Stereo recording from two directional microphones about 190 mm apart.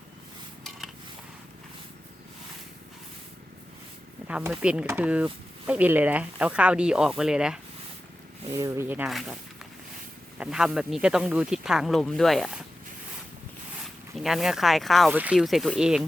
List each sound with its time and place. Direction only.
4.3 s speech: 5° right (ahead or behind)
8.5 s speech: 15° right (ahead or behind)
13.8 s speech: centre (ahead or behind)